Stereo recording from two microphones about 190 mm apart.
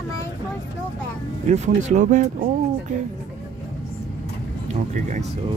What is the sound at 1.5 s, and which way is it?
Speech, 35° right (ahead or behind).